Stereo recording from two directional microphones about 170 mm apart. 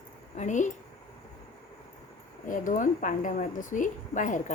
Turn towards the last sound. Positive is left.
turn(degrees=50)  # may be behind; listen again after turning